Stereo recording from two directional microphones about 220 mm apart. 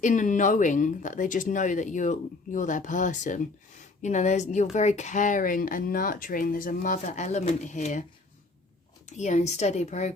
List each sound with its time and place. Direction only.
0.0 s speech: 35° left (ahead or behind)
9.0 s speech: 30° left (ahead or behind)